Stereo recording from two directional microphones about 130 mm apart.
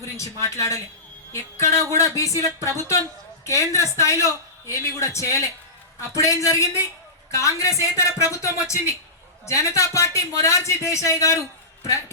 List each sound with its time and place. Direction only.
0.2 s a man's voice: 25° left (ahead or behind)